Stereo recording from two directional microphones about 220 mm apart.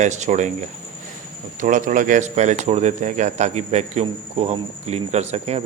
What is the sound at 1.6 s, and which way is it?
Speech, 35° right (ahead or behind).